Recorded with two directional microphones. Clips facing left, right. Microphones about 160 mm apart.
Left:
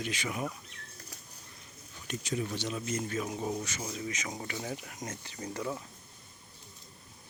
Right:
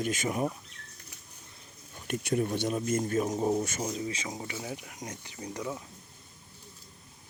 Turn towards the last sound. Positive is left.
turn(degrees=-15)  # may be behind; listen again after turning